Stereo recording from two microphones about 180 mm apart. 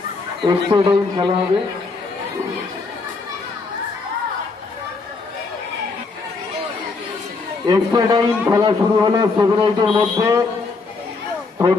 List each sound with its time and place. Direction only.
0.5 s a man's voice: 25° right (ahead or behind)
7.6 s a man's voice: 20° right (ahead or behind)